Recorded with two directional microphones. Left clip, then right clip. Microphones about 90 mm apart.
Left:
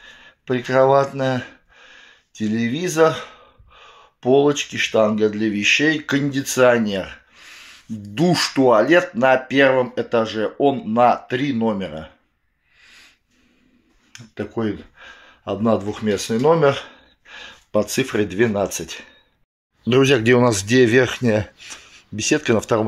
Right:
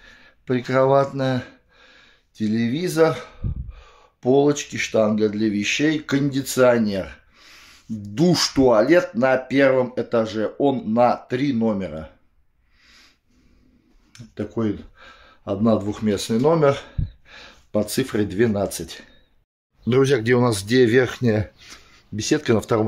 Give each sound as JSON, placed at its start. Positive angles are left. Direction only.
{"t": 0.0, "sound": "speech", "side_deg": -40}
{"t": 14.1, "sound": "speech", "side_deg": -25}
{"t": 19.9, "sound": "speech", "side_deg": -5}